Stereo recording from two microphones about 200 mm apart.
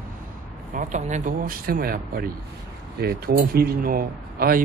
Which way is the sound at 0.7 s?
40° right (ahead or behind).